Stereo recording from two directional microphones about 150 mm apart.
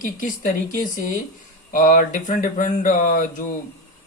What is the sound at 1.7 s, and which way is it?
Speech, 60° left (ahead or behind).